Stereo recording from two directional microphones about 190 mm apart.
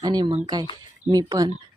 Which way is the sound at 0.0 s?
20° right (ahead or behind).